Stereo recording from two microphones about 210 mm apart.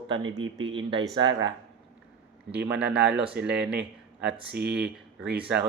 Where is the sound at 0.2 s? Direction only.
70° right (ahead or behind).